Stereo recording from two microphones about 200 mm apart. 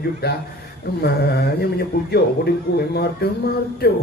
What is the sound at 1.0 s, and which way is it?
Speech, 55° left (ahead or behind).